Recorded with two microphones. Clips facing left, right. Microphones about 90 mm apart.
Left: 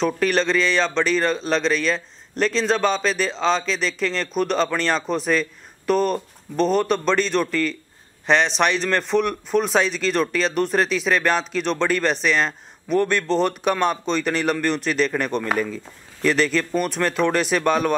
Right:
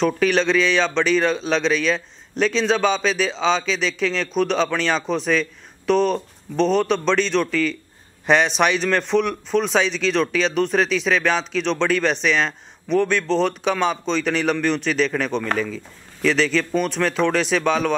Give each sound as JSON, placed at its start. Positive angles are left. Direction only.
{"t": 0.0, "sound": "speech", "side_deg": 0}